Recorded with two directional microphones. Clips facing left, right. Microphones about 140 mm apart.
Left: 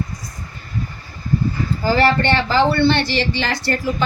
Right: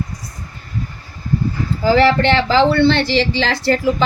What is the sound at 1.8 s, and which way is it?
Speech, 90° right.